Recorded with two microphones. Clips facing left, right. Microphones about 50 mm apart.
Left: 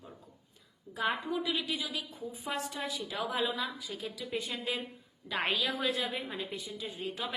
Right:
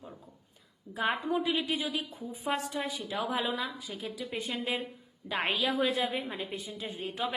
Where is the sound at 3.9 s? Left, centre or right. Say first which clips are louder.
Even; right.